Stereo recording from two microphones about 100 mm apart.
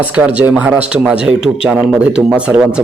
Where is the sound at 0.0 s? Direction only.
15° right (ahead or behind).